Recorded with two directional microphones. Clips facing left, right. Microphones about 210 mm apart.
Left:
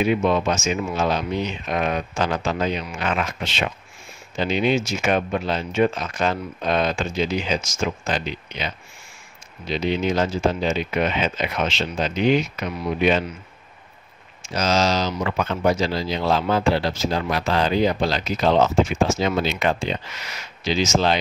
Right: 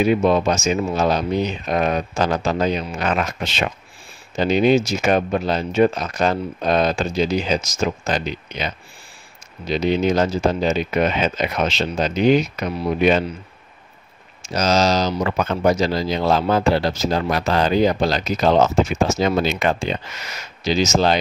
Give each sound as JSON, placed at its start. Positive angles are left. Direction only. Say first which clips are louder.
{"t": 0.0, "sound": "speech", "louder": "right 3 dB", "side_deg": -40}
{"t": 14.4, "sound": "speech", "louder": "right 3 dB", "side_deg": -40}